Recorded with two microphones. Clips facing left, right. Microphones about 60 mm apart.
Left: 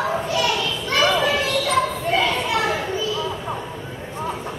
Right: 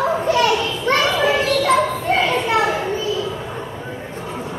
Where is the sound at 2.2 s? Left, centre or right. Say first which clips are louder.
Right 2 dB; right.